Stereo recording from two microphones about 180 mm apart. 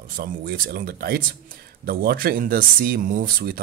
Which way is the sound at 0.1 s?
60° right (ahead or behind).